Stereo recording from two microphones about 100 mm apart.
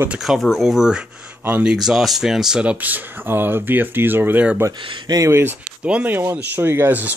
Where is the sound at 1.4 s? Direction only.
20° right (ahead or behind).